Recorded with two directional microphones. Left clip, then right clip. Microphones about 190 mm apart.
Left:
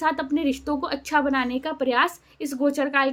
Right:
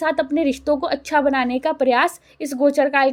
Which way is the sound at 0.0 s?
25° right (ahead or behind).